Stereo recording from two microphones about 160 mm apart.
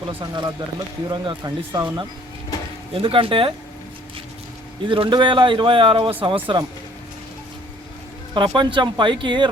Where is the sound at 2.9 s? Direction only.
35° right (ahead or behind).